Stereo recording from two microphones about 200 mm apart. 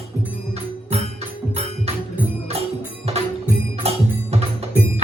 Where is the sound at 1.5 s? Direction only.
30° right (ahead or behind).